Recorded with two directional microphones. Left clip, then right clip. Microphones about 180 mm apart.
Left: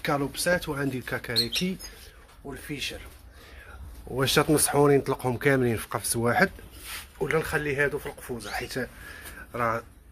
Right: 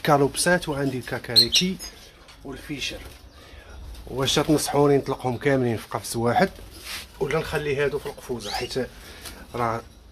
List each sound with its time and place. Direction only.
0.0 s speech: 30° right (ahead or behind)
0.7 s speech: 5° right (ahead or behind)
2.7 s speech: 15° left (ahead or behind)
4.1 s speech: 15° left (ahead or behind)
7.2 s speech: 10° left (ahead or behind); by 9.8 s 5° right (ahead or behind)